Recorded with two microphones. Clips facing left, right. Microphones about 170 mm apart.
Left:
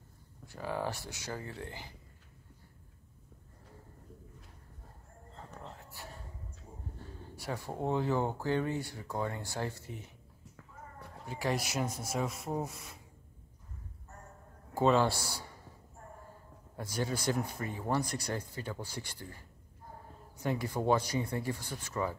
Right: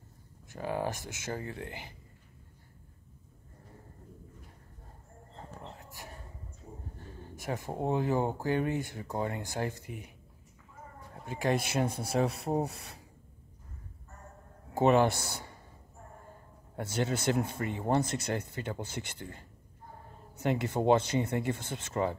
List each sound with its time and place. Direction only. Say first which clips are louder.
0.5 s speech: right 3 dB; 15° right (ahead or behind)
1.3 s speech: right 3 dB; 55° right (ahead or behind)
1.7 s speech: right 2 dB; 20° right (ahead or behind)
7.3 s speech: right 3 dB; 20° right (ahead or behind)
11.2 s speech: right 4 dB; 20° right (ahead or behind)
11.7 s speech: right 5 dB; 60° right (ahead or behind)
12.4 s speech: right 5 dB; 35° right (ahead or behind)
14.7 s a sound: right 2 dB; 20° right (ahead or behind)
15.0 s speech: right 2 dB; 20° right (ahead or behind)
16.8 s speech: right 3 dB; 25° right (ahead or behind)
20.5 s speech: right 4 dB; 25° right (ahead or behind)